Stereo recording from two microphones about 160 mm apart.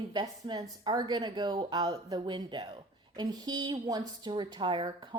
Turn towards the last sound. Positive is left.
turn(degrees=-30)  # may be behind; listen again after turning